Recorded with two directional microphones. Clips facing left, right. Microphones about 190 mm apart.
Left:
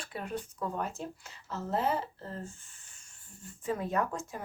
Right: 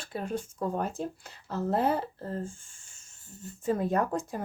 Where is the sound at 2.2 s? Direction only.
35° right (ahead or behind).